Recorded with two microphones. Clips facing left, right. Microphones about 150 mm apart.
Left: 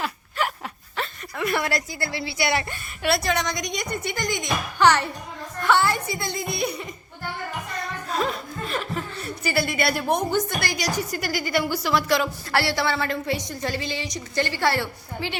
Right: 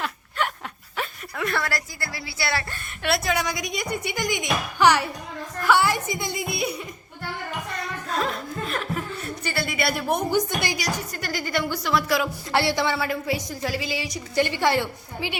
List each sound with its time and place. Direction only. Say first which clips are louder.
0.0 s a sound: left 1 dB; centre (ahead or behind)
1.5 s a woman's voice: left 3 dB; 20° left (ahead or behind)
2.8 s a woman's voice: even; centre (ahead or behind)
8.1 s chuckle: even; centre (ahead or behind)
10.3 s a woman's voice: right 1 dB; 15° right (ahead or behind)
11.1 s speech: left 3 dB; 10° left (ahead or behind)
12.5 s a woman's voice: right 2 dB; 20° right (ahead or behind)